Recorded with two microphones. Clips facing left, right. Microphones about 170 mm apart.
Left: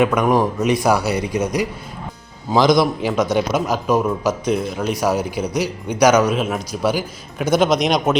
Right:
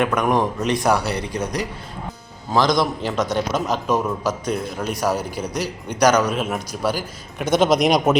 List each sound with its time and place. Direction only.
0.0 s speech: 5° left (ahead or behind)
2.7 s a man's voice: 5° left (ahead or behind)